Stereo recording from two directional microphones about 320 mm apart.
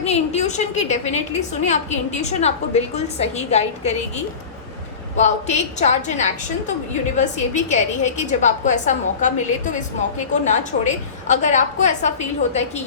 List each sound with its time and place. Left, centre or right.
0.0 s a woman's voice: centre
5.1 s a woman's voice: left